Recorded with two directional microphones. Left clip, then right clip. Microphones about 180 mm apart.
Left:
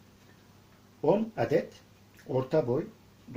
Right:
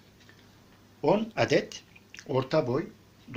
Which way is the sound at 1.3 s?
10° left (ahead or behind).